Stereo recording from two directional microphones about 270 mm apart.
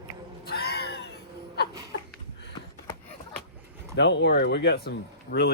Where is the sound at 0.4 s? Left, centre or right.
Left.